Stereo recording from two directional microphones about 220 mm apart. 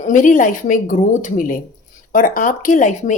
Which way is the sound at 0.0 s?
35° left (ahead or behind).